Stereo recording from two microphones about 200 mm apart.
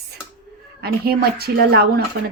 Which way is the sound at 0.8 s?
50° right (ahead or behind).